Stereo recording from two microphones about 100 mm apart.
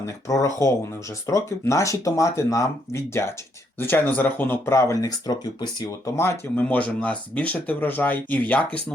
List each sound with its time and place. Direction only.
0.3 s speech: 30° left (ahead or behind)
6.6 s speech: 15° left (ahead or behind)